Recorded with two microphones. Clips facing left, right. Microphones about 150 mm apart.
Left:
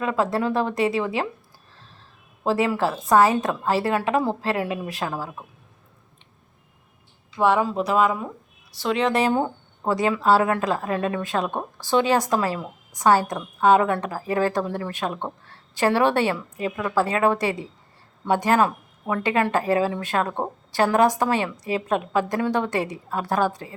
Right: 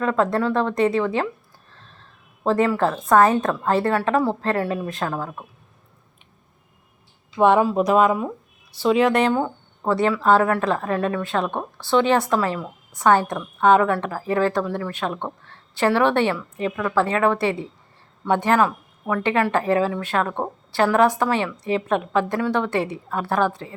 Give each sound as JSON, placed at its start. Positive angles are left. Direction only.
{"t": 0.0, "sound": "a woman's voice", "side_deg": 10}
{"t": 2.4, "sound": "a woman's voice", "side_deg": 5}
{"t": 7.3, "sound": "speech", "side_deg": -20}
{"t": 9.0, "sound": "speech", "side_deg": 5}
{"t": 9.3, "sound": "a woman's voice", "side_deg": 15}
{"t": 18.6, "sound": "a woman's voice", "side_deg": 20}